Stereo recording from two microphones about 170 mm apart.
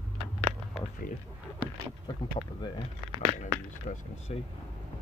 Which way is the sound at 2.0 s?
25° left (ahead or behind).